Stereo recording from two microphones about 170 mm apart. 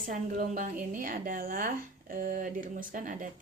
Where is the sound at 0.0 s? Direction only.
50° right (ahead or behind).